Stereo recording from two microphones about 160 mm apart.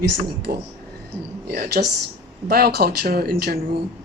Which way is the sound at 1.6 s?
70° right (ahead or behind).